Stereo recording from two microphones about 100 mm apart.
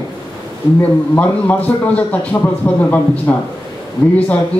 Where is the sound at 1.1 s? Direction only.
15° left (ahead or behind).